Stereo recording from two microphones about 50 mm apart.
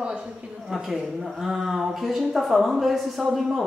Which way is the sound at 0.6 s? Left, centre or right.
Centre.